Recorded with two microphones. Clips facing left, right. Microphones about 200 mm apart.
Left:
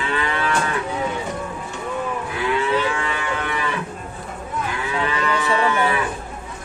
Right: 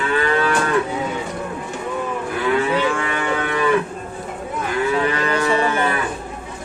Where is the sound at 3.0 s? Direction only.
50° right (ahead or behind).